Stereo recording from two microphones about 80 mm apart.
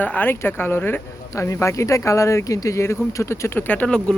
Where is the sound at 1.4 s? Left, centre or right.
Left; by 4.0 s centre.